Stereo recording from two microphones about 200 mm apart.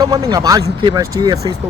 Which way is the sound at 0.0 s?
20° right (ahead or behind).